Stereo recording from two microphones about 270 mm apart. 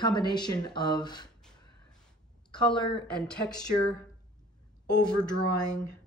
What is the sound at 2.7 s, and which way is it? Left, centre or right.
Speech, centre.